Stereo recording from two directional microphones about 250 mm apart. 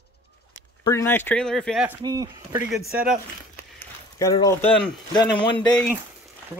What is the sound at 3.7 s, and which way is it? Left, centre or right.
Speech, centre.